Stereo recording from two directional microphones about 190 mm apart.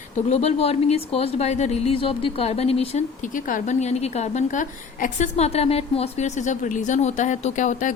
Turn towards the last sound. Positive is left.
turn(degrees=40)  # may be behind; listen again after turning